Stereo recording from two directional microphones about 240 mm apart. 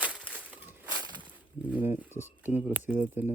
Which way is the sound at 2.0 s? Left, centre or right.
Centre.